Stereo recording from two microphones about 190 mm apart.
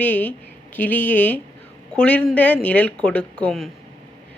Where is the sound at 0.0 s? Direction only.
10° left (ahead or behind).